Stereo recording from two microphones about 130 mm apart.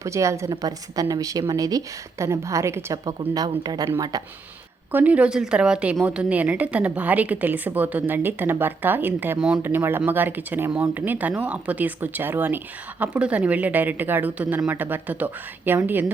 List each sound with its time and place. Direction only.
0.0 s a woman's voice: 25° right (ahead or behind)
4.9 s a woman's voice: 15° right (ahead or behind)